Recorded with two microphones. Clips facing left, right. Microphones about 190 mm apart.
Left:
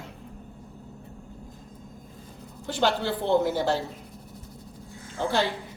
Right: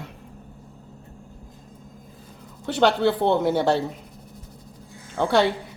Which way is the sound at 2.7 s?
65° right (ahead or behind).